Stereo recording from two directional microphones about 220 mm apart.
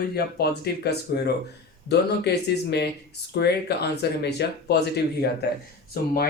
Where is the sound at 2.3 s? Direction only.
50° left (ahead or behind).